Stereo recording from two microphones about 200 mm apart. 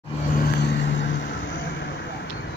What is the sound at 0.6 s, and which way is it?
Vehicle, 60° left (ahead or behind).